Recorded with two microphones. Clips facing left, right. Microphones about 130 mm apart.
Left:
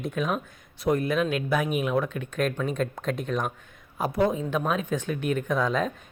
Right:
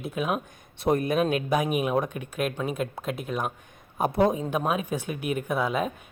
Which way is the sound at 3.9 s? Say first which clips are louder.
Right 2 dB; 25° right (ahead or behind).